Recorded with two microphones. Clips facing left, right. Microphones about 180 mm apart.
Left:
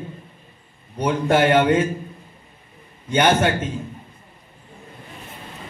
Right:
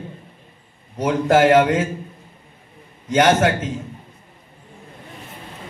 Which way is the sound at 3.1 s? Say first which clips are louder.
Right 2 dB; 90° right.